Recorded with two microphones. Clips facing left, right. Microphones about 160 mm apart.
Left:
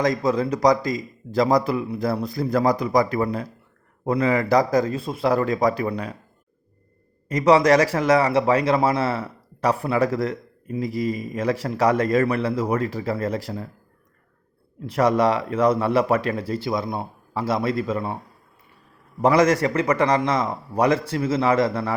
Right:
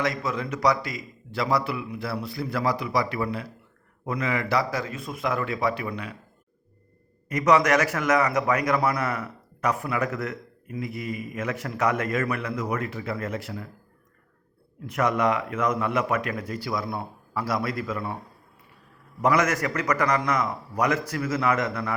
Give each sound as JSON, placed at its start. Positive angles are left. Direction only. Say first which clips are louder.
{"t": 0.0, "sound": "speech", "louder": "left 7 dB", "side_deg": 35}
{"t": 7.3, "sound": "speech", "louder": "left 5 dB", "side_deg": 30}
{"t": 14.8, "sound": "speech", "louder": "left 5 dB", "side_deg": 30}
{"t": 19.2, "sound": "a man's voice", "louder": "left 5 dB", "side_deg": 30}